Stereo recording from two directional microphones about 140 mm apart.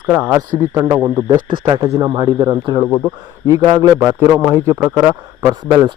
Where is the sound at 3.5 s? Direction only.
30° right (ahead or behind).